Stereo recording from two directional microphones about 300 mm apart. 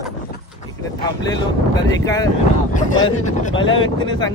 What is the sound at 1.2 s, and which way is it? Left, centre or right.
Speech, centre.